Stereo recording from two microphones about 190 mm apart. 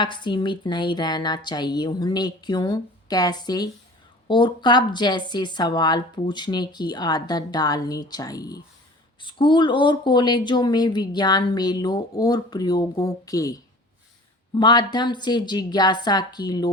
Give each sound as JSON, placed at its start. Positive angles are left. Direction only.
{"t": 0.0, "sound": "speech", "side_deg": 25}